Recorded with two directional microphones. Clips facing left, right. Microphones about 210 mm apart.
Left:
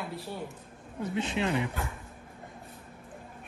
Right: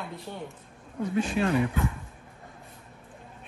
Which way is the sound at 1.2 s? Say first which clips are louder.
Right 4 dB; 20° left (ahead or behind).